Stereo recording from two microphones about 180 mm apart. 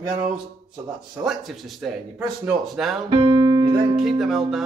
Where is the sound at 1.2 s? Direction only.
Centre (ahead or behind).